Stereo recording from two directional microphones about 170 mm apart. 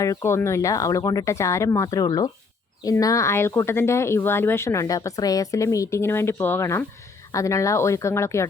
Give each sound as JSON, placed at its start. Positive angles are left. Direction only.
{"t": 0.0, "sound": "speech", "side_deg": 15}